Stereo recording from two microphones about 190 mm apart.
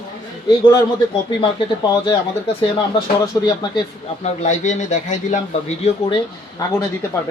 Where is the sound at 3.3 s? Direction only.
20° left (ahead or behind).